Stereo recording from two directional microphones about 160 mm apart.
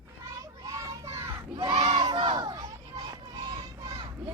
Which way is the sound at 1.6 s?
30° right (ahead or behind).